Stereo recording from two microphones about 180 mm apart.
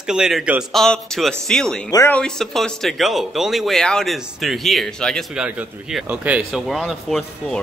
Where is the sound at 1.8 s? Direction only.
20° left (ahead or behind).